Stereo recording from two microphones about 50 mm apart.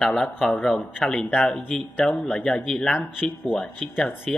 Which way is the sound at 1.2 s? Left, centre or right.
Left.